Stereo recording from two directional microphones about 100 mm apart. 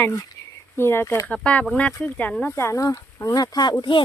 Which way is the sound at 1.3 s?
10° left (ahead or behind).